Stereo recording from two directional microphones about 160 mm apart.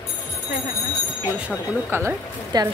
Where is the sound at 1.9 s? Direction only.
15° right (ahead or behind).